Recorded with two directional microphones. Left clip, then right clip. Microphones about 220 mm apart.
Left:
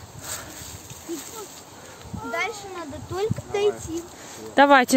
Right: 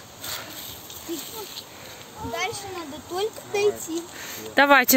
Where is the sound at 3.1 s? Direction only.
40° right (ahead or behind).